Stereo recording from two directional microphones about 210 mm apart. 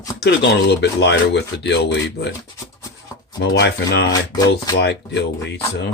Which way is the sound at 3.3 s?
55° left (ahead or behind).